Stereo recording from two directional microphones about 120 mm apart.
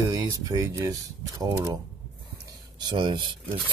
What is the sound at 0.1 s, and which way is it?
Speech, 30° right (ahead or behind).